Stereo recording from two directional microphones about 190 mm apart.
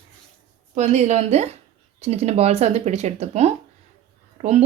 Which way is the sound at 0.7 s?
35° right (ahead or behind).